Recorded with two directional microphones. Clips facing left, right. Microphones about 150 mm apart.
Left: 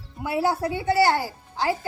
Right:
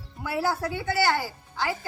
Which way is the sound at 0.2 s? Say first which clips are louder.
Left 3 dB; 20° left (ahead or behind).